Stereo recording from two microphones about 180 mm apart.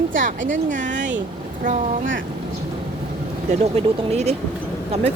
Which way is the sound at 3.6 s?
35° right (ahead or behind).